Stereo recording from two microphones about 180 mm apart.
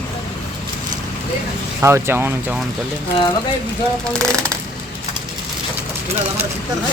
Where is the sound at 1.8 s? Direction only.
15° right (ahead or behind).